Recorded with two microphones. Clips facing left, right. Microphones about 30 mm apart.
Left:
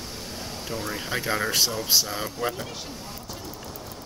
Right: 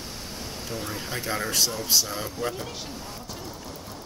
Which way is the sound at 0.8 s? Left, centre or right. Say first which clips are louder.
Left 4 dB; centre.